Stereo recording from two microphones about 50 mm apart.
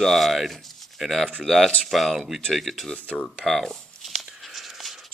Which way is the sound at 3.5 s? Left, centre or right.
Centre.